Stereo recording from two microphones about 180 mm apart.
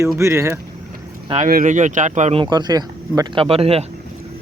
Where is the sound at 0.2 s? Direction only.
15° right (ahead or behind).